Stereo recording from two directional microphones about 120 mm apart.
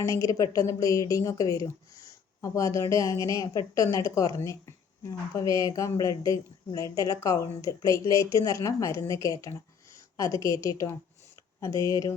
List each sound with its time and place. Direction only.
0.0 s speech: 25° left (ahead or behind)